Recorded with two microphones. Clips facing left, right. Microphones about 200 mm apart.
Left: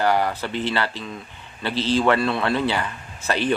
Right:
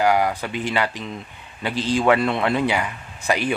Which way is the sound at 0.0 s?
10° right (ahead or behind).